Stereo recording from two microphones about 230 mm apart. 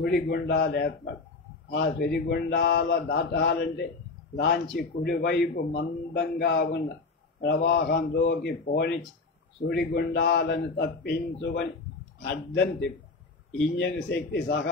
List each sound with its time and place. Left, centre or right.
0.0 s speech: left
13.7 s speech: left